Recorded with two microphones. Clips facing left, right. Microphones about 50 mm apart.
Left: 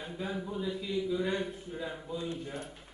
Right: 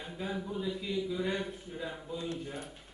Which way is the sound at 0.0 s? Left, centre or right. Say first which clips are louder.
Left 1 dB; centre.